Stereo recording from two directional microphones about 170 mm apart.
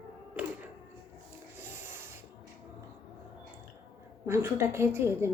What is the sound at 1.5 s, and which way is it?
Rub, 15° right (ahead or behind).